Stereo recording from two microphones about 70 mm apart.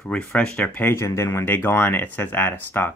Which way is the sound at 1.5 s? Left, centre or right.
Left.